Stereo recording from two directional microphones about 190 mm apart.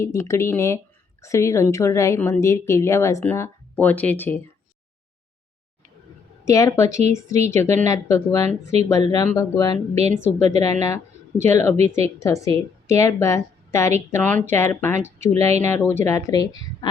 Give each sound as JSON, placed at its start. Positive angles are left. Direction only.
{"t": 0.0, "sound": "a woman's voice", "side_deg": 15}
{"t": 6.4, "sound": "a woman's voice", "side_deg": 15}
{"t": 9.9, "sound": "a woman's voice", "side_deg": -35}
{"t": 10.2, "sound": "a woman's voice", "side_deg": 15}